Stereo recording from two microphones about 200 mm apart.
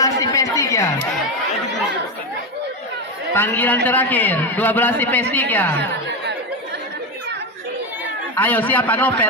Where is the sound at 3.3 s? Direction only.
10° left (ahead or behind).